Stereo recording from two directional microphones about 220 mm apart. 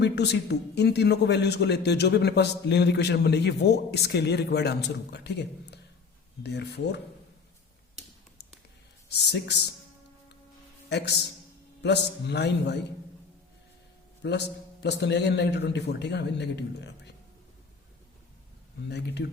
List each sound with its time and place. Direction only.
0.0 s a man's voice: 50° left (ahead or behind)
8.4 s a sound: 50° left (ahead or behind)
9.0 s a man's voice: 50° left (ahead or behind)
10.8 s a man's voice: 50° left (ahead or behind)
14.2 s a man's voice: 50° left (ahead or behind)
18.9 s a man's voice: 50° left (ahead or behind)